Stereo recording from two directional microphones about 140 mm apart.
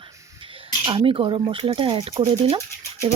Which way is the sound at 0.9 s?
35° right (ahead or behind).